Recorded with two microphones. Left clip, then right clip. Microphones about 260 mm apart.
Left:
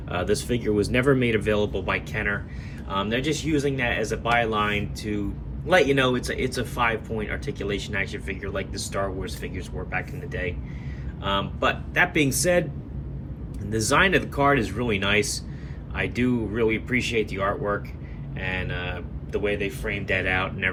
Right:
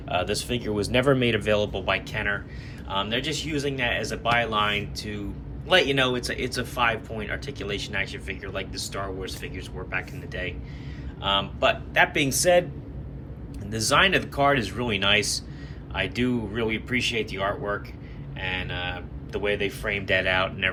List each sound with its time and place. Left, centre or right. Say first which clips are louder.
0.1 s speech: left 1 dB; centre
13.7 s speech: even; centre